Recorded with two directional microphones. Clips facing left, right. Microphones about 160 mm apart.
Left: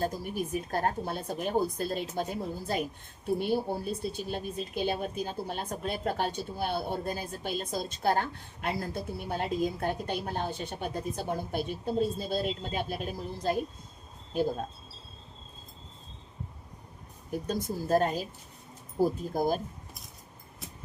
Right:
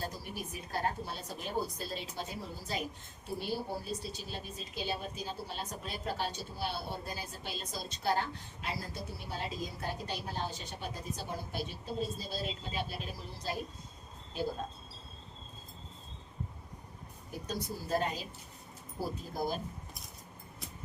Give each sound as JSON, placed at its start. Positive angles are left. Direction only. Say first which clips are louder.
{"t": 0.0, "sound": "a woman's voice", "louder": "left 9 dB", "side_deg": 50}
{"t": 17.4, "sound": "speech", "louder": "left 5 dB", "side_deg": 50}